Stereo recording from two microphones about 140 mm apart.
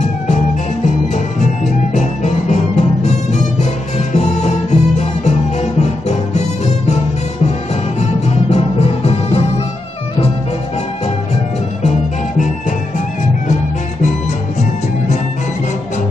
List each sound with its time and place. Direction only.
2.0 s music: 55° left (ahead or behind)
4.1 s music: 55° left (ahead or behind)
8.0 s music: 50° left (ahead or behind)